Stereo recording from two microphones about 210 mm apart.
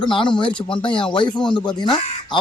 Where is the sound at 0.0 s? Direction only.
25° left (ahead or behind).